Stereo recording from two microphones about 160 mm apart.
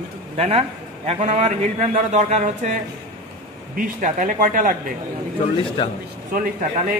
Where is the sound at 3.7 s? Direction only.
55° right (ahead or behind).